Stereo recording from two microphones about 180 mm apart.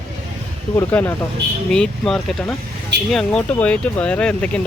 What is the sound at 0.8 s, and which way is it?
Speech, 10° left (ahead or behind).